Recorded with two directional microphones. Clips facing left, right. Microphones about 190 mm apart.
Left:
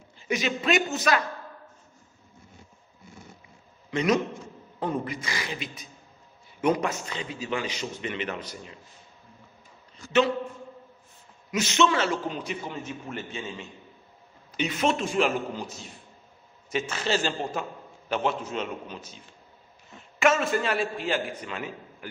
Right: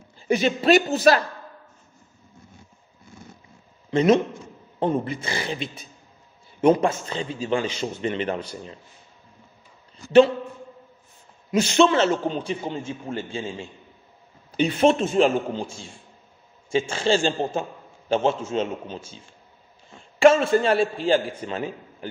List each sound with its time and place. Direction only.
0.3 s a man's voice: 35° right (ahead or behind)
3.9 s a man's voice: 30° right (ahead or behind)
11.5 s a man's voice: 30° right (ahead or behind)